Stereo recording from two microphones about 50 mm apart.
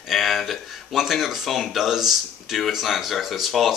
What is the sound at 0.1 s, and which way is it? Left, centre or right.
A man's voice, centre.